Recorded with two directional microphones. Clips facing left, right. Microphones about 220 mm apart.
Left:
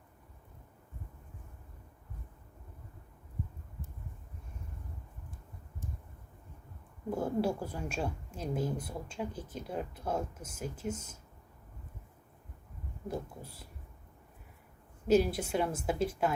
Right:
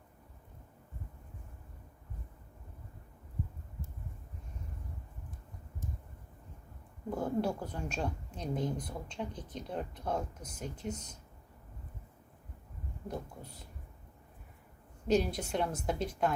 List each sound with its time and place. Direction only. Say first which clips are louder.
7.1 s a woman's voice: left 1 dB; 10° left (ahead or behind)
15.0 s a woman's voice: left 3 dB; 5° left (ahead or behind)